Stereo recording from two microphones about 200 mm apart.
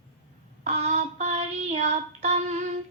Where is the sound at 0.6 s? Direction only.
35° right (ahead or behind).